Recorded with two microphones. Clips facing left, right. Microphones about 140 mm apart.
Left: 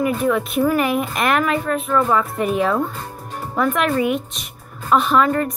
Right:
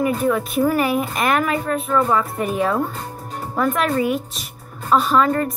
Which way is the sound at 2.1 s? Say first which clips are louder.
Left 1 dB; 35° right (ahead or behind).